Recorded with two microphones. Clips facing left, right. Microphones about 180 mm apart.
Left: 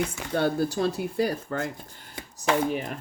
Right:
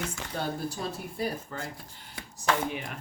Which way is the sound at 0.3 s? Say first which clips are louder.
Left 9 dB; 75° left (ahead or behind).